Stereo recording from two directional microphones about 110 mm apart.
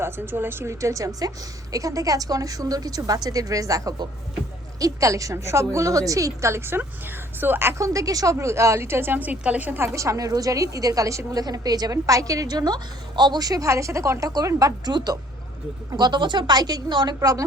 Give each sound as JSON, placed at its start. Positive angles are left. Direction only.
{"t": 0.0, "sound": "a woman's voice", "side_deg": -20}
{"t": 17.2, "sound": "speech", "side_deg": -30}